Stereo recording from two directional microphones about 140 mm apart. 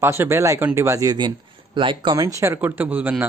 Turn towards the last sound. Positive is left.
turn(degrees=-15)  # may be behind; listen again after turning